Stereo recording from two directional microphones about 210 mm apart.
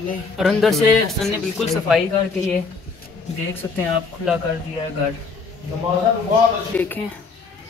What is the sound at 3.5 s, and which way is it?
Speech, 10° left (ahead or behind).